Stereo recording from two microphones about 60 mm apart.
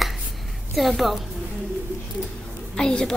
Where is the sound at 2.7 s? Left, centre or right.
Centre.